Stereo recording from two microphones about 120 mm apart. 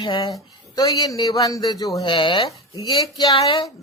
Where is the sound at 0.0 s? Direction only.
40° left (ahead or behind).